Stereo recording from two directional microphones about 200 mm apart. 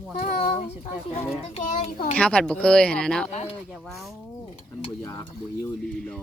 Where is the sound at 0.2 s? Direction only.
45° left (ahead or behind).